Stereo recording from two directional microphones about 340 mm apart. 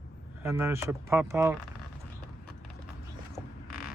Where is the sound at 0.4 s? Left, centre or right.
Centre.